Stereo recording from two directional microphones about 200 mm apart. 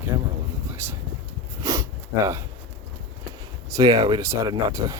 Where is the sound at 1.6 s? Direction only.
15° right (ahead or behind).